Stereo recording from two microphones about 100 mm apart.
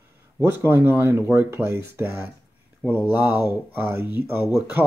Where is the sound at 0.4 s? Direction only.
20° right (ahead or behind).